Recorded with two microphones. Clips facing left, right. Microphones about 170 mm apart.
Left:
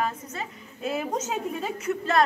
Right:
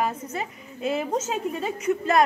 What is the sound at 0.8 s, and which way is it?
Speech, centre (ahead or behind).